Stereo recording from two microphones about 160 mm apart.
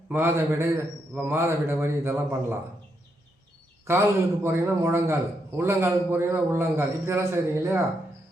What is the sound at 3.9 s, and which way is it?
A man's voice, 15° right (ahead or behind).